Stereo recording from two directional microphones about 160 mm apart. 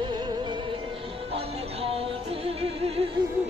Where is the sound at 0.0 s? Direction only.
30° right (ahead or behind).